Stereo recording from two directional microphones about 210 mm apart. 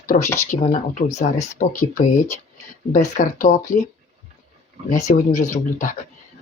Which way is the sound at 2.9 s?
40° left (ahead or behind).